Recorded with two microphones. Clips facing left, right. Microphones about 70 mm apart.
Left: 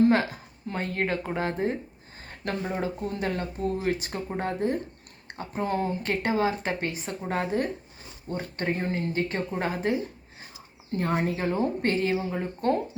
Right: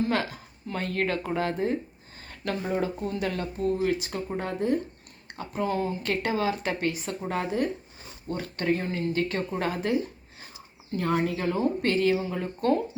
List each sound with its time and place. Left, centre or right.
0.7 s speech: left
2.3 s a sound: left
2.8 s speech: left
7.3 s speech: left
10.9 s speech: left